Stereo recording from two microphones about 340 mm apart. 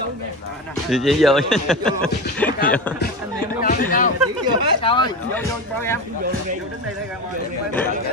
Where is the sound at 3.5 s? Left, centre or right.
Left; by 6.0 s centre.